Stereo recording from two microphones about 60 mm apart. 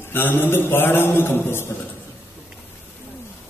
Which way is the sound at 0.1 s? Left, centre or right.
Left.